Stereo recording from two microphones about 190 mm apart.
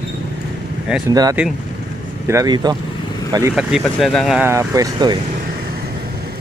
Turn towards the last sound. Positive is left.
turn(degrees=-20)  # may be behind; listen again after turning